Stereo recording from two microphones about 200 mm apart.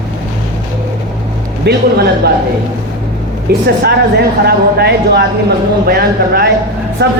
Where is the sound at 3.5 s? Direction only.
55° right (ahead or behind).